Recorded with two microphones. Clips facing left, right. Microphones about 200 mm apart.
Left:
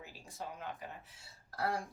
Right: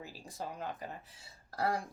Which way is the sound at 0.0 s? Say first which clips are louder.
Right 3 dB; 35° right (ahead or behind).